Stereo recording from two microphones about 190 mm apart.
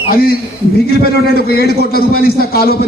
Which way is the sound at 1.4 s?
55° left (ahead or behind).